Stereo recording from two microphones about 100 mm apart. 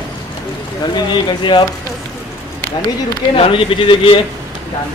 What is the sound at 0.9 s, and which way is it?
Speech, 55° left (ahead or behind).